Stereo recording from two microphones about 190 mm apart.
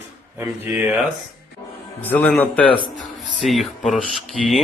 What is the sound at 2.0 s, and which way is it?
Speech, 10° left (ahead or behind).